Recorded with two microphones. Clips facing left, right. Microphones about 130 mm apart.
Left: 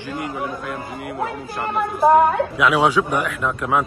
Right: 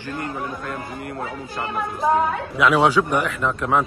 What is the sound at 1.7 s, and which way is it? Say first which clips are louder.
Speech: left 6 dB; 60° left (ahead or behind).